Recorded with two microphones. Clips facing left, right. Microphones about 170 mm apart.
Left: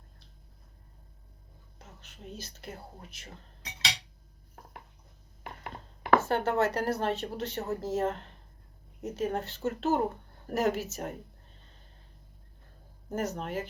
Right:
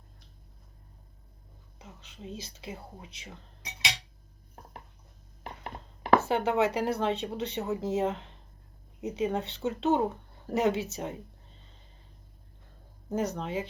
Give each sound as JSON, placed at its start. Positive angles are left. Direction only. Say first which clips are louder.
{"t": 2.3, "sound": "speech", "louder": "right 2 dB", "side_deg": 0}
{"t": 5.4, "sound": "a sound", "louder": "right 1 dB", "side_deg": -35}
{"t": 6.1, "sound": "a woman's voice", "louder": "right 1 dB", "side_deg": 0}
{"t": 13.1, "sound": "speech", "louder": "right 2 dB", "side_deg": 0}